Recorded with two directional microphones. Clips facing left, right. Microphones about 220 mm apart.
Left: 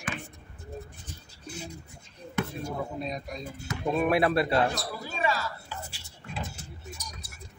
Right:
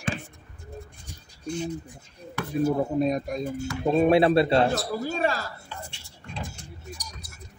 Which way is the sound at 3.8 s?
30° right (ahead or behind).